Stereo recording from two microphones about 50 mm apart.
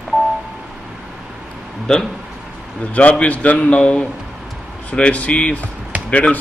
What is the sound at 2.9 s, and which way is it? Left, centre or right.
A man's voice, left.